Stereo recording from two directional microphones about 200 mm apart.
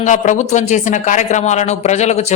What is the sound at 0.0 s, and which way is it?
Speech, 40° left (ahead or behind).